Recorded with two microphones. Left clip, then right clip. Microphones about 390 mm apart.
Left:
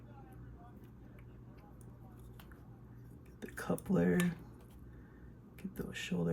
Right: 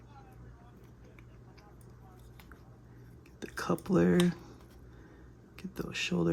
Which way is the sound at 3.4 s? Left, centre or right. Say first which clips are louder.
Right 5 dB; centre.